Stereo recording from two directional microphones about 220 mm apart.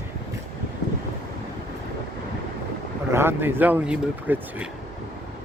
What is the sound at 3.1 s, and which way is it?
Speech, 10° right (ahead or behind).